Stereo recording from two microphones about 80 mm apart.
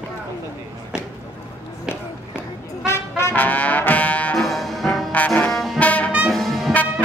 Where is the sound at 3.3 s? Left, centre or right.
Centre.